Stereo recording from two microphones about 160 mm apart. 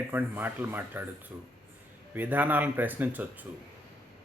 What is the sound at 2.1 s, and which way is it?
A man's voice, 10° right (ahead or behind).